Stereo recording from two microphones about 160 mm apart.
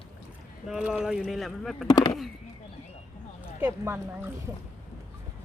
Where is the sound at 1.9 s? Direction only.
25° left (ahead or behind).